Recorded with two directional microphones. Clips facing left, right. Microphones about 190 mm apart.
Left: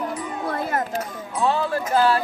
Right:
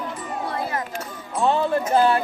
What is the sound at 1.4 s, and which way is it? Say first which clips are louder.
Speech: right 2 dB; 20° right (ahead or behind).